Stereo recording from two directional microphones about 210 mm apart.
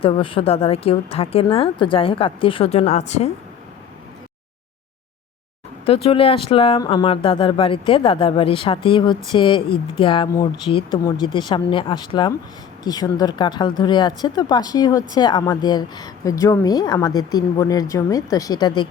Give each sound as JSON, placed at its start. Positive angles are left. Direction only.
{"t": 0.0, "sound": "speech", "side_deg": 25}
{"t": 5.8, "sound": "speech", "side_deg": 25}